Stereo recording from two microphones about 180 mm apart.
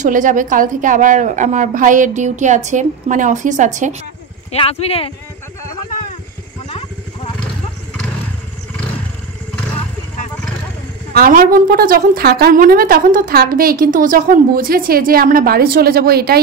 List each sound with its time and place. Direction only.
0.0 s a woman's voice: 45° right (ahead or behind)
4.5 s speech: 35° left (ahead or behind)
11.1 s a woman's voice: 50° right (ahead or behind)